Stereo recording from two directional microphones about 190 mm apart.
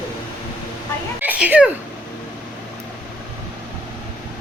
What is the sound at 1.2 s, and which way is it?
Speech, 10° right (ahead or behind).